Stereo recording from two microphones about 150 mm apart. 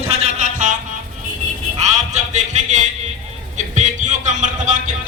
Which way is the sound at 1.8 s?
50° right (ahead or behind).